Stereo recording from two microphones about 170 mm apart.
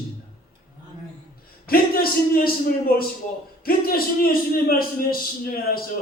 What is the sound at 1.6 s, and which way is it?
A man's voice, 60° left (ahead or behind).